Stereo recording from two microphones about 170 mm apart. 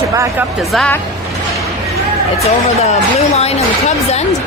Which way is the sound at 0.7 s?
5° left (ahead or behind).